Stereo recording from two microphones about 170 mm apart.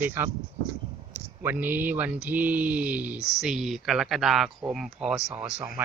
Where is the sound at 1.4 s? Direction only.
10° right (ahead or behind).